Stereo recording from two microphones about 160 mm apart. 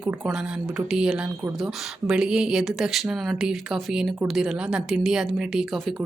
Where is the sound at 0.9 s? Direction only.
5° right (ahead or behind).